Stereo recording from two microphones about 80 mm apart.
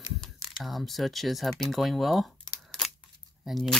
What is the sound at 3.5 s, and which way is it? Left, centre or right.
Speech, centre.